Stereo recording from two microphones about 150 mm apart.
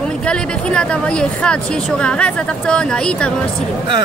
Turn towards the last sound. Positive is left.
turn(degrees=5)  # may be behind; listen again after turning